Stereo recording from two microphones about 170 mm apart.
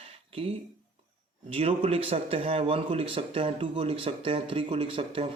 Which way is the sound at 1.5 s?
35° right (ahead or behind).